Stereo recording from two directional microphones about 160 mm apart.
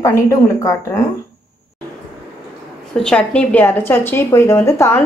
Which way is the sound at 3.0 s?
5° left (ahead or behind).